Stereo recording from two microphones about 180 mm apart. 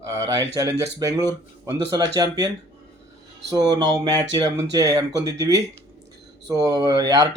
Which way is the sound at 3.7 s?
20° right (ahead or behind).